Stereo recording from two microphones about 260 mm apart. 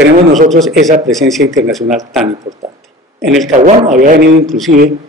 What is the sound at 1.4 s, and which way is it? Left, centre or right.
Speech, right.